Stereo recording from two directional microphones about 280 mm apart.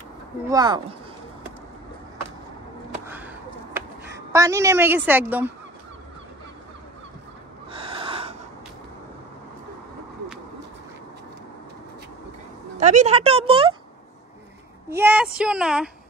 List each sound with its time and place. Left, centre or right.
0.5 s a woman's voice: centre
3.1 s a sound: centre
4.3 s a woman's voice: centre
7.7 s snort: centre
12.7 s speech: right
14.9 s a woman's voice: centre